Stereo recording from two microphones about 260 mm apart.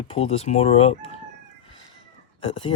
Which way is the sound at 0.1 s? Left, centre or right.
Left.